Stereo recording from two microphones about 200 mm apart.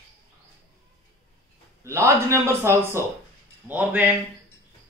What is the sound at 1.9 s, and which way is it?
Speech, 15° right (ahead or behind).